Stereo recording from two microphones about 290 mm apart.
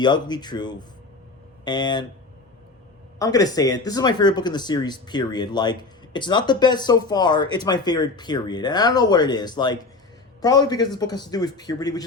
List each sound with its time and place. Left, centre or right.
0.0 s speech: centre
3.2 s speech: centre